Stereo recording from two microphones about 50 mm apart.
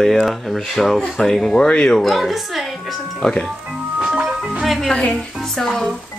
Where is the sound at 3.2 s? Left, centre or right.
Centre.